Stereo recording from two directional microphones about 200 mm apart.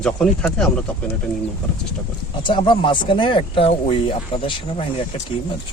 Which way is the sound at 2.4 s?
25° left (ahead or behind).